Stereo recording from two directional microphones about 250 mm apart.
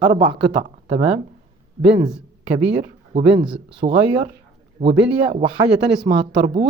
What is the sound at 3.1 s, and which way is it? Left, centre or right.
Speech, centre.